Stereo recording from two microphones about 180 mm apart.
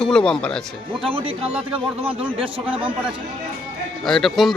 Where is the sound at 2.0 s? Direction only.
30° right (ahead or behind).